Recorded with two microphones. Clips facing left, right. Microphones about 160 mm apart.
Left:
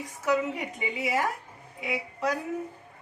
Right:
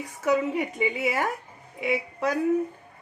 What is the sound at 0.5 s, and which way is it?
Speech, 60° right (ahead or behind).